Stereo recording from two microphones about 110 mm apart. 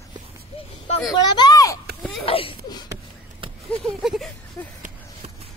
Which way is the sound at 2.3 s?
60° left (ahead or behind).